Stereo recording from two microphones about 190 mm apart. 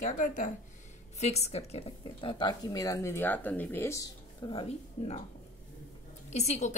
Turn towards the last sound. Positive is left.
turn(degrees=35)  # may be behind; listen again after turning